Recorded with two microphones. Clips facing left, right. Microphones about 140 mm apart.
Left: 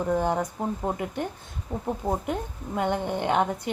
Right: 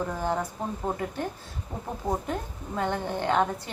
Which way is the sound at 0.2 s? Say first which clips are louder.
Left 3 dB; 20° left (ahead or behind).